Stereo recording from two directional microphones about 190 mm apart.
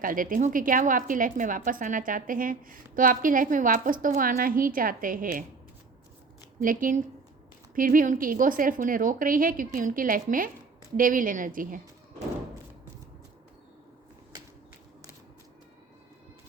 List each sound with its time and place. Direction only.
0.0 s a woman's voice: 45° right (ahead or behind)
6.6 s a woman's voice: 45° right (ahead or behind)